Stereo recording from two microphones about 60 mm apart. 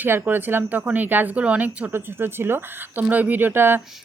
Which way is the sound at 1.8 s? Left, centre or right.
Right.